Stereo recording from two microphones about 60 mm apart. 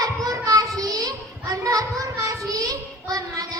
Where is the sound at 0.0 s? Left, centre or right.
Right.